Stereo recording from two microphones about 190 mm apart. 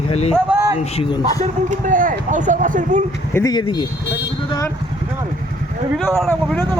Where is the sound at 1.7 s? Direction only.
45° right (ahead or behind).